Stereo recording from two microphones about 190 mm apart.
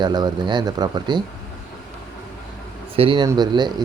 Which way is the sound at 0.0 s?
20° right (ahead or behind).